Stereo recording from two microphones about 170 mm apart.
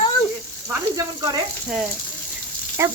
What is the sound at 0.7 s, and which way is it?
Speech, 20° right (ahead or behind).